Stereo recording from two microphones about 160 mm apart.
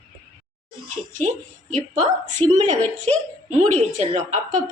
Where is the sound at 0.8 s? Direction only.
50° right (ahead or behind).